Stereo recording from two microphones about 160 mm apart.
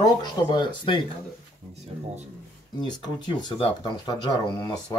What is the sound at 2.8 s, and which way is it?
Speech, 30° left (ahead or behind).